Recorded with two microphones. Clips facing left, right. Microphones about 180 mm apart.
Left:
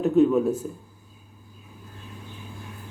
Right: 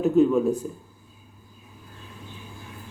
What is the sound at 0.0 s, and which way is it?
Speech, centre (ahead or behind).